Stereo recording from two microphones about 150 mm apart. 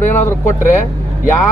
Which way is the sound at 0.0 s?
15° left (ahead or behind).